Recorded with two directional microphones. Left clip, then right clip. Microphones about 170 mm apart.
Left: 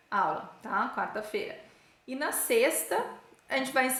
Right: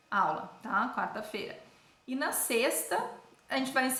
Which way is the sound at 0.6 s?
20° left (ahead or behind).